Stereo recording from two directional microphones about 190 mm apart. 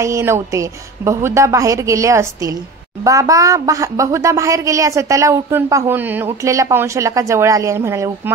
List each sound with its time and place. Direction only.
0.0 s speech: 15° right (ahead or behind)